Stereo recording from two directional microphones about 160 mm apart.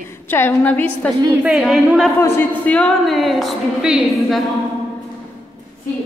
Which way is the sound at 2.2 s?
15° left (ahead or behind).